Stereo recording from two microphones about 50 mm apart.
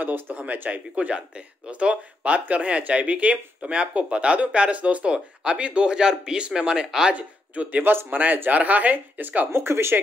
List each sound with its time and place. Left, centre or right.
0.0 s speech: right
0.7 s speech: right
7.2 s speech: right
7.8 s speech: right
8.2 s speech: right
9.5 s speech: right